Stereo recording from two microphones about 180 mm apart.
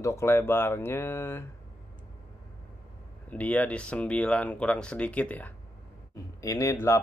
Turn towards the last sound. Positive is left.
turn(degrees=15)  # may be behind; listen again after turning